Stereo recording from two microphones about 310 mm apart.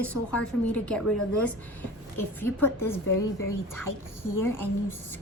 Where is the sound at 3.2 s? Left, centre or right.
Left.